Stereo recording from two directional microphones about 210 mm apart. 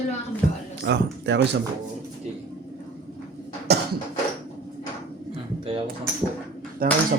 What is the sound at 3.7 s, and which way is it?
Cough, 50° right (ahead or behind).